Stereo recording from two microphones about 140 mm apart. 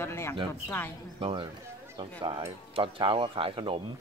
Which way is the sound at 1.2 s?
35° right (ahead or behind).